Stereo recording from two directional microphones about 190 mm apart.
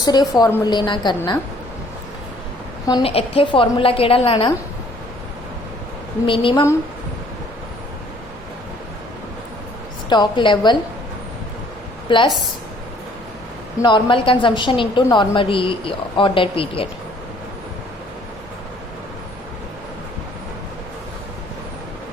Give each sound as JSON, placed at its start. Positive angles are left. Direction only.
{"t": 0.0, "sound": "a woman's voice", "side_deg": 20}
{"t": 2.8, "sound": "a woman's voice", "side_deg": 25}
{"t": 6.2, "sound": "a woman's voice", "side_deg": 25}
{"t": 10.1, "sound": "a woman's voice", "side_deg": 25}
{"t": 12.0, "sound": "a woman's voice", "side_deg": 25}
{"t": 13.8, "sound": "a woman's voice", "side_deg": 25}